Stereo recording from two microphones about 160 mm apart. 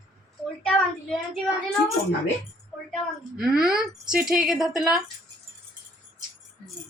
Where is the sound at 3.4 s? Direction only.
5° right (ahead or behind).